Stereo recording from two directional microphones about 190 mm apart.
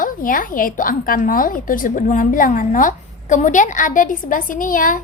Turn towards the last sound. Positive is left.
turn(degrees=45)  # may be behind; listen again after turning